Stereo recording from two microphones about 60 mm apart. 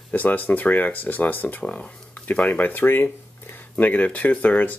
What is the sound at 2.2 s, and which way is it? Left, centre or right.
Speech, left.